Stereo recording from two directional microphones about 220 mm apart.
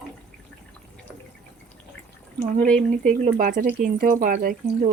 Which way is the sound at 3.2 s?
35° right (ahead or behind).